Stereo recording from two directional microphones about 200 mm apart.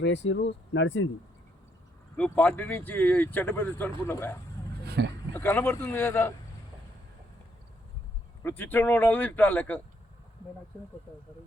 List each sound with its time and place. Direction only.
0.0 s speech: 60° left (ahead or behind)
2.1 s speech: 5° left (ahead or behind)
5.0 s a man's voice: 60° right (ahead or behind)
5.3 s speech: 10° left (ahead or behind)
8.4 s speech: 10° left (ahead or behind)